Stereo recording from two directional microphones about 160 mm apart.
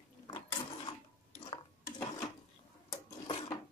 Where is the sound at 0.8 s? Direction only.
30° left (ahead or behind).